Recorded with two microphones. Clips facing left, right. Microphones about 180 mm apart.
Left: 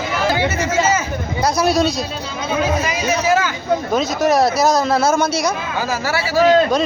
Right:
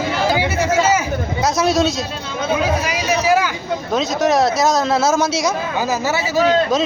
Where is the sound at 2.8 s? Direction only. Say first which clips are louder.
Even; 10° right (ahead or behind).